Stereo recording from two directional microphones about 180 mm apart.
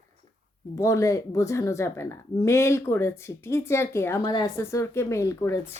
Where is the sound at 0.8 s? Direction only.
20° left (ahead or behind).